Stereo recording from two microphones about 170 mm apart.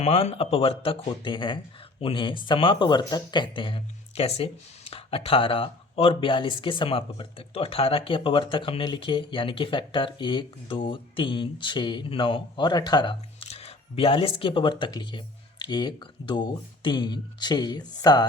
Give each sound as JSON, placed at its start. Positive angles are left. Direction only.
{"t": 0.0, "sound": "speech", "side_deg": 35}